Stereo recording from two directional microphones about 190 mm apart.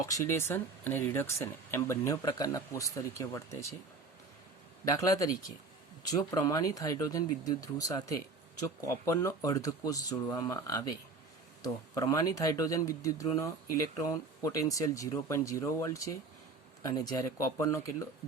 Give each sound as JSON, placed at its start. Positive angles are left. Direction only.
{"t": 0.0, "sound": "speech", "side_deg": 15}
{"t": 4.9, "sound": "speech", "side_deg": 20}